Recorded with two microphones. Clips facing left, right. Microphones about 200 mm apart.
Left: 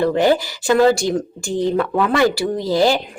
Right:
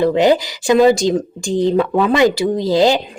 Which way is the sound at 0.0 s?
15° right (ahead or behind).